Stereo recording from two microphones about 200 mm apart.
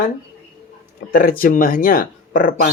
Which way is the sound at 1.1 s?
45° left (ahead or behind).